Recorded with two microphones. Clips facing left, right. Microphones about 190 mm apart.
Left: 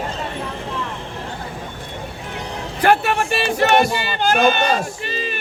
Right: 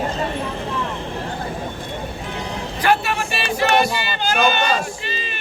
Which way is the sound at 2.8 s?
50° left (ahead or behind).